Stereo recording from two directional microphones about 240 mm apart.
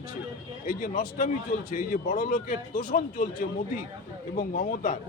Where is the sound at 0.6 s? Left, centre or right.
Left.